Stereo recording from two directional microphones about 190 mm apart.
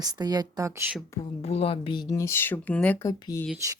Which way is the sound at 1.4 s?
30° left (ahead or behind).